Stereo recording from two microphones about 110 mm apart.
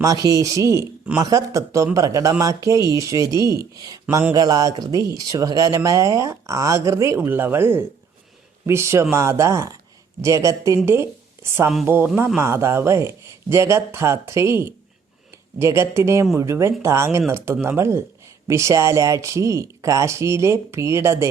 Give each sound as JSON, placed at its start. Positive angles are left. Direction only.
{"t": 0.0, "sound": "speech", "side_deg": -30}
{"t": 7.2, "sound": "speech", "side_deg": -20}